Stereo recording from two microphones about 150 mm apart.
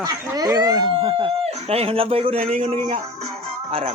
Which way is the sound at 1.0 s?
35° right (ahead or behind).